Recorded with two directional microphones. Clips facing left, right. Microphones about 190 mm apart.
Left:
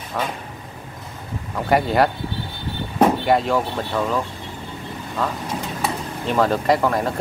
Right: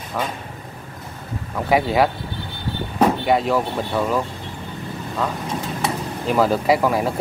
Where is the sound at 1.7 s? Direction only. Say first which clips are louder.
Even; centre (ahead or behind).